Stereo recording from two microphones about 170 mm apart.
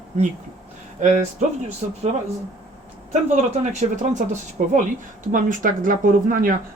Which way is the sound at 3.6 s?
45° right (ahead or behind).